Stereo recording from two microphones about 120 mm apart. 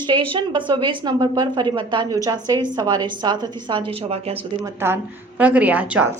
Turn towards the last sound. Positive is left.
turn(degrees=-10)  # may be behind; listen again after turning